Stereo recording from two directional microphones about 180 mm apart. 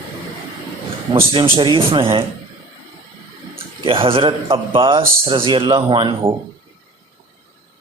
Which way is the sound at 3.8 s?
30° right (ahead or behind).